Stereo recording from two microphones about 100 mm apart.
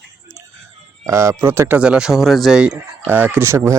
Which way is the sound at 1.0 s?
30° right (ahead or behind).